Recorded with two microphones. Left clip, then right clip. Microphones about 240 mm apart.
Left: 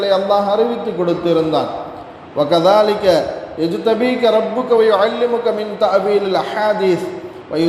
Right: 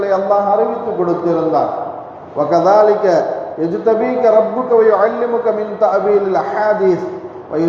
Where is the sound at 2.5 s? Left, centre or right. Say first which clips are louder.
Right 2 dB; left.